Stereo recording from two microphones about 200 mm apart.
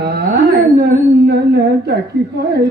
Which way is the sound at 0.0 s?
55° right (ahead or behind).